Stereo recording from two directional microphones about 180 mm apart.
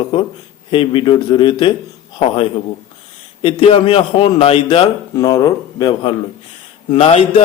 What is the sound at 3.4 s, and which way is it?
Speech, 30° left (ahead or behind).